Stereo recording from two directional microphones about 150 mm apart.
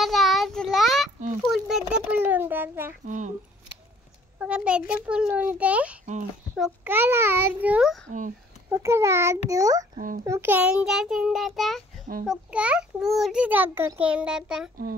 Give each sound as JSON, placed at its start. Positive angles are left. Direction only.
{"t": 0.0, "sound": "child singing", "side_deg": 0}
{"t": 1.4, "sound": "a child's voice", "side_deg": 0}
{"t": 3.1, "sound": "a child's voice", "side_deg": -55}
{"t": 4.4, "sound": "a child's voice", "side_deg": -5}
{"t": 6.9, "sound": "a child's voice", "side_deg": -15}
{"t": 9.9, "sound": "a child's voice", "side_deg": -65}
{"t": 10.2, "sound": "a child's voice", "side_deg": -15}